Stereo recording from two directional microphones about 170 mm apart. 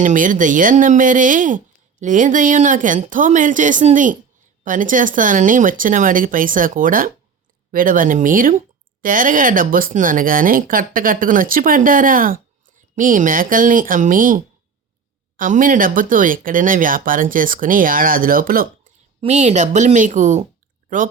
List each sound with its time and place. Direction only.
0.0 s speech: 50° right (ahead or behind)
19.2 s speech: 40° right (ahead or behind)